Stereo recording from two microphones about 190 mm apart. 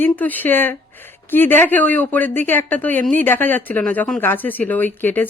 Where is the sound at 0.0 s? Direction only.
10° left (ahead or behind).